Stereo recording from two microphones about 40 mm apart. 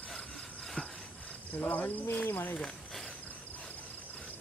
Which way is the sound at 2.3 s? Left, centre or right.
Left.